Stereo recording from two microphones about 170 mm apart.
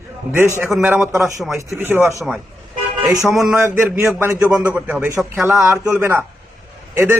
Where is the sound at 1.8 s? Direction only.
15° right (ahead or behind).